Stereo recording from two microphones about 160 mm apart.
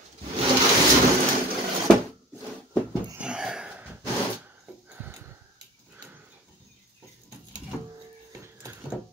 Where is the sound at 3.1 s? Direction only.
5° right (ahead or behind).